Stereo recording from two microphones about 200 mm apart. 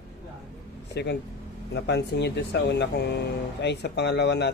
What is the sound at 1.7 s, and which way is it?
Speech, 60° left (ahead or behind).